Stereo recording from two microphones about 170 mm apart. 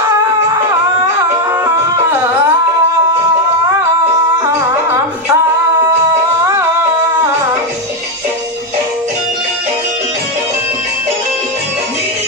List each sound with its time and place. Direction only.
1.6 s a sound: 15° right (ahead or behind)
4.4 s music: 20° right (ahead or behind)
6.4 s music: 15° right (ahead or behind)